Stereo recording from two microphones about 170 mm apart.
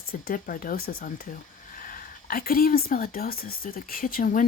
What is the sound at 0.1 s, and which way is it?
Speech, 60° left (ahead or behind).